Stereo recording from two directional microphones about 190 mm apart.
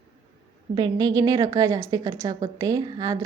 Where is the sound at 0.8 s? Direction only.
20° right (ahead or behind).